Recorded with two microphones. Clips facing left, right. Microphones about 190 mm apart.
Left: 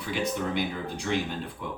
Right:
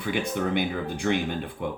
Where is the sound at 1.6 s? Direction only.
60° right (ahead or behind).